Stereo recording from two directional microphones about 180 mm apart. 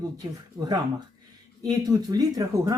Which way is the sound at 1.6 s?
20° right (ahead or behind).